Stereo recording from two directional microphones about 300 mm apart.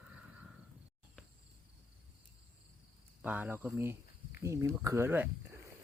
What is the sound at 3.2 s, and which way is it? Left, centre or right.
Speech, centre.